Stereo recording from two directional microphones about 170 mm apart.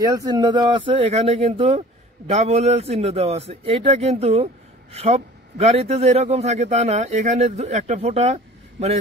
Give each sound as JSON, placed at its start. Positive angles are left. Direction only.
{"t": 0.0, "sound": "speech", "side_deg": -20}